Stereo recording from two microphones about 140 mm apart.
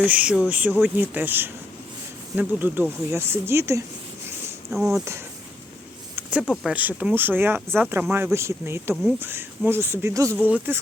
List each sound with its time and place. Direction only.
0.0 s a woman's voice: 10° right (ahead or behind)
4.7 s speech: centre (ahead or behind)
6.4 s speech: centre (ahead or behind)
6.7 s speech: 10° right (ahead or behind)